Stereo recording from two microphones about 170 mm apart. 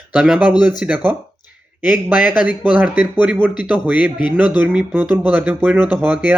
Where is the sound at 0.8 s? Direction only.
10° right (ahead or behind).